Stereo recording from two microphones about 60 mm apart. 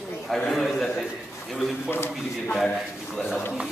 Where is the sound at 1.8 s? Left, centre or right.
Left.